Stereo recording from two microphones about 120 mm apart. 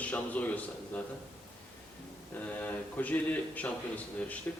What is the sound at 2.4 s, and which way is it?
A man's voice, 15° left (ahead or behind).